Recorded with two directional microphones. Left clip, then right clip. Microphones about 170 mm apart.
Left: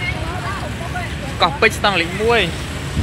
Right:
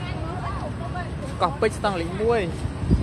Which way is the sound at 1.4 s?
5° right (ahead or behind).